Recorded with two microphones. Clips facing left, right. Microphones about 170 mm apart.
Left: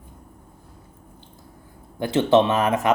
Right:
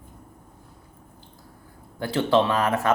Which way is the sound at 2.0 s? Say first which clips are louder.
Left 4 dB; 20° left (ahead or behind).